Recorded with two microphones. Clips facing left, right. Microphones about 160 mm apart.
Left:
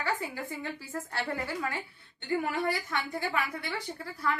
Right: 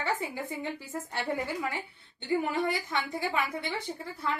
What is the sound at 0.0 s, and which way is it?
A woman's voice, 20° right (ahead or behind).